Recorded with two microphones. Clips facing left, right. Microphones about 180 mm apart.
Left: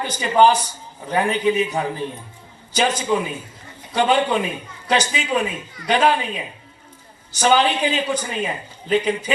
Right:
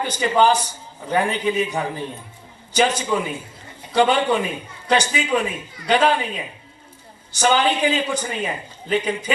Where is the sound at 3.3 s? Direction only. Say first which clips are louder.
Even; 10° right (ahead or behind).